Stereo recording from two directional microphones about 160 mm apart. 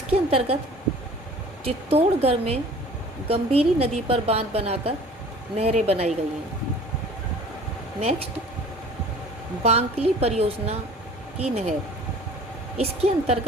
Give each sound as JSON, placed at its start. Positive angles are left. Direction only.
{"t": 0.1, "sound": "a woman's voice", "side_deg": -35}
{"t": 1.6, "sound": "a woman's voice", "side_deg": -40}
{"t": 9.6, "sound": "a woman's voice", "side_deg": -40}
{"t": 12.7, "sound": "a woman's voice", "side_deg": -40}